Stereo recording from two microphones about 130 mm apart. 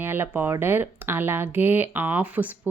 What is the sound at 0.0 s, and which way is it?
A woman's voice, 15° right (ahead or behind).